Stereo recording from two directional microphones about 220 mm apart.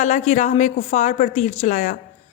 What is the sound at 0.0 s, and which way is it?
A woman's voice, 35° left (ahead or behind).